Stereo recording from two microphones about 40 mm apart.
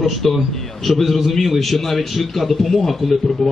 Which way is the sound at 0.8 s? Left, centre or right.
Centre.